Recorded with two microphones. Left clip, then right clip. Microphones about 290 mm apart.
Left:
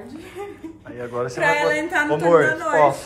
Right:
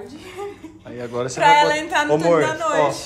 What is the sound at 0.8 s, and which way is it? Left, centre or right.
Speech, centre.